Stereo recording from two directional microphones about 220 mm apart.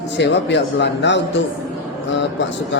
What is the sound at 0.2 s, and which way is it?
A man's voice, 55° left (ahead or behind).